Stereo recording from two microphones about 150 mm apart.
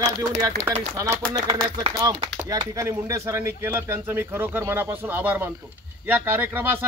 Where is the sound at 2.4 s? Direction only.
25° right (ahead or behind).